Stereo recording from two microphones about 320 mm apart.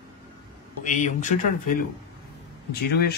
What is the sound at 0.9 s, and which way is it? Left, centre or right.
Speech, left.